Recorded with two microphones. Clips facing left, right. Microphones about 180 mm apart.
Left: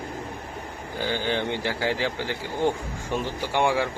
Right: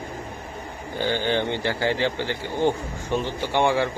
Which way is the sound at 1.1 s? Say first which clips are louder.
Right 3 dB; 5° left (ahead or behind).